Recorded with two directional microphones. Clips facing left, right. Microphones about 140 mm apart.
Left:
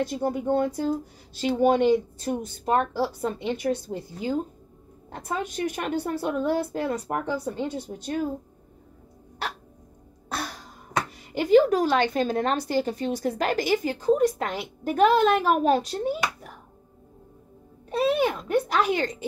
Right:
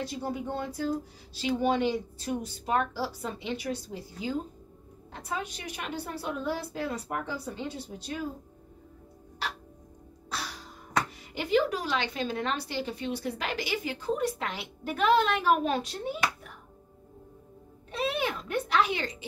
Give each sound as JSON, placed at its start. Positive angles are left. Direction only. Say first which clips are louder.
{"t": 0.0, "sound": "a woman's voice", "louder": "left 7 dB", "side_deg": 50}
{"t": 10.3, "sound": "music", "louder": "left 5 dB", "side_deg": 50}
{"t": 11.3, "sound": "a woman's voice", "louder": "left 8 dB", "side_deg": 45}
{"t": 17.9, "sound": "speech", "louder": "left 8 dB", "side_deg": 40}